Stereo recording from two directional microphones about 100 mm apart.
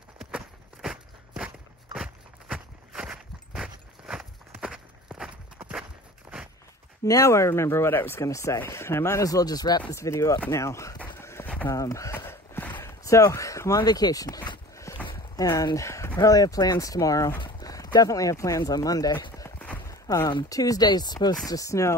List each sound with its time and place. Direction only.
0.8 s walk: 10° right (ahead or behind)
7.1 s speech: 30° left (ahead or behind)
9.9 s speech: 30° left (ahead or behind)
11.0 s a sound: 25° left (ahead or behind)
13.0 s speech: 35° left (ahead or behind)
14.9 s a sound: 30° left (ahead or behind)
15.3 s speech: 35° left (ahead or behind)
17.4 s horse: 40° left (ahead or behind)
17.9 s speech: 35° left (ahead or behind)
19.9 s a sound: 35° left (ahead or behind)
20.4 s speech: 35° left (ahead or behind)